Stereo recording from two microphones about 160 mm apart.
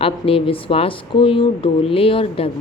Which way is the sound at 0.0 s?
35° left (ahead or behind).